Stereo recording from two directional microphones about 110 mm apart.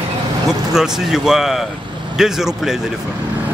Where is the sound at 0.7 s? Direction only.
5° right (ahead or behind).